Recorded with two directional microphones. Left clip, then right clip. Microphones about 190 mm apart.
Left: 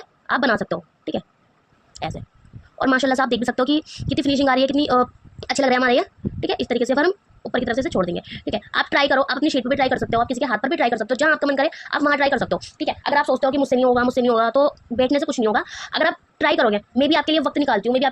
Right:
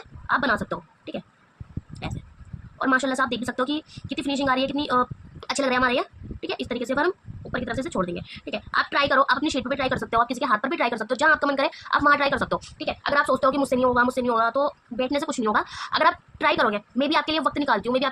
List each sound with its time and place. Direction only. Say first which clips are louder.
0.0 s a woman's voice: left 3 dB; 30° left (ahead or behind)
2.7 s a woman's voice: left 4 dB; 25° left (ahead or behind)
15.2 s a woman's voice: left 3 dB; 15° left (ahead or behind)